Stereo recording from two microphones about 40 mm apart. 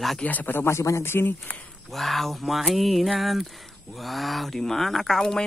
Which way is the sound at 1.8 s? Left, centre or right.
Centre.